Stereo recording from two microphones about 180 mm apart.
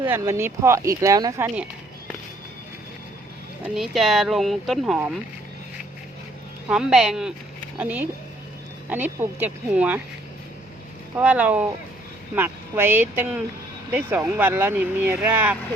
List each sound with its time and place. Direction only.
0.0 s speech: 15° right (ahead or behind)
3.6 s speech: centre (ahead or behind)
6.7 s speech: 5° right (ahead or behind)
11.2 s speech: 10° right (ahead or behind)